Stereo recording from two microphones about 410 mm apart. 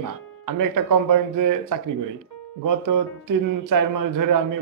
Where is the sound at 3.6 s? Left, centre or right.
Right.